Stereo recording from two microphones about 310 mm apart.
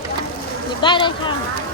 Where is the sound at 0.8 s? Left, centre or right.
Centre.